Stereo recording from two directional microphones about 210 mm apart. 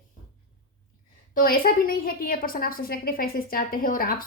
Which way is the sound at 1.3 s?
45° left (ahead or behind).